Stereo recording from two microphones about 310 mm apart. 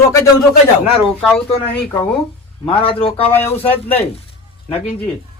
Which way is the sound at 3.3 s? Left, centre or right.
Centre.